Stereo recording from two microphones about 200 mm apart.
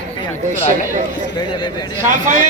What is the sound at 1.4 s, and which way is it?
Speech, 20° left (ahead or behind).